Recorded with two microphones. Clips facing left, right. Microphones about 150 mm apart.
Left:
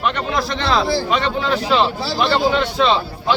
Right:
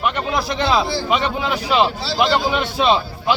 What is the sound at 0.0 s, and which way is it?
Speech, 5° right (ahead or behind).